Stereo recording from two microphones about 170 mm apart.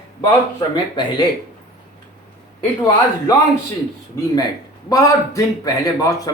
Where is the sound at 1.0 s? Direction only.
25° left (ahead or behind).